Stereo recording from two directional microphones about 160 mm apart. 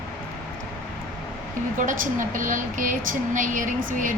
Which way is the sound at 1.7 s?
55° right (ahead or behind).